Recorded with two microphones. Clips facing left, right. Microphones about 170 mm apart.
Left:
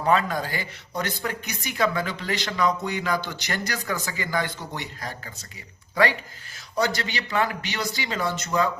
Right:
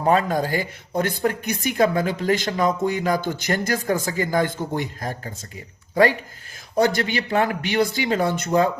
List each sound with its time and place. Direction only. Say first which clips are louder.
0.0 s speech: right 3 dB; 45° right (ahead or behind)